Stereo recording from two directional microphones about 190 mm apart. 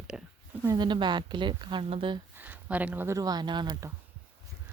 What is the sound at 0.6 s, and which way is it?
A woman's voice, 20° right (ahead or behind).